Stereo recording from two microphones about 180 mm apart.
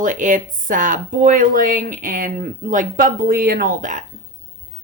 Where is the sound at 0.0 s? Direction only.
45° right (ahead or behind).